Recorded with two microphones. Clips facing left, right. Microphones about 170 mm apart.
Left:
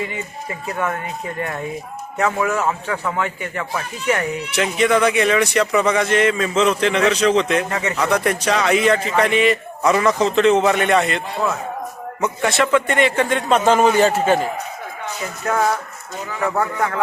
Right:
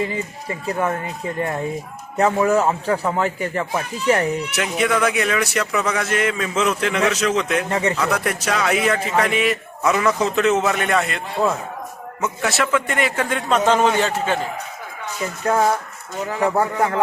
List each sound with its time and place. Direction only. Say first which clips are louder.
0.0 s a man's voice: right 2 dB; 30° right (ahead or behind)
4.5 s a man's voice: left 6 dB; 5° right (ahead or behind)
7.7 s a man's voice: right 3 dB; 30° right (ahead or behind)
7.9 s a man's voice: left 3 dB; centre (ahead or behind)
12.2 s a man's voice: left 3 dB; 5° right (ahead or behind)
15.4 s a man's voice: right 1 dB; 30° right (ahead or behind)